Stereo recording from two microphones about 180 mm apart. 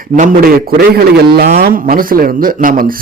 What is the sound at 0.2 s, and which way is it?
A man's voice, 55° right (ahead or behind).